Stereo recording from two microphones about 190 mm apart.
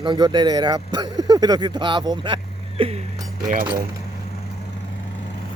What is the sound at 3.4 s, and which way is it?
Speech, 45° right (ahead or behind).